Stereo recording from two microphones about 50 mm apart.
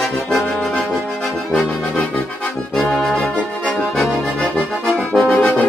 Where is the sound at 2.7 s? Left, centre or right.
Centre.